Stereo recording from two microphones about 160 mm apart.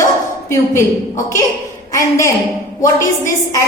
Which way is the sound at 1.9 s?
20° left (ahead or behind).